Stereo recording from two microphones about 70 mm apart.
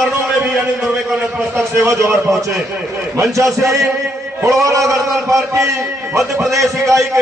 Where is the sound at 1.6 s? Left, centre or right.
Right.